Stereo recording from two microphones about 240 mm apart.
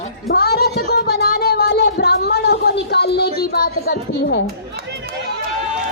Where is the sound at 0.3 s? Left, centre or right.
Left.